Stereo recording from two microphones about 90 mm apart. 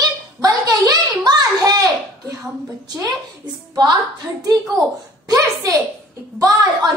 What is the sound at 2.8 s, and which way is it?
A woman's voice, 50° right (ahead or behind).